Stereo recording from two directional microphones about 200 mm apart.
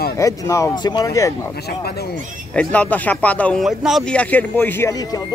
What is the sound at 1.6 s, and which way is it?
Speech, 50° left (ahead or behind).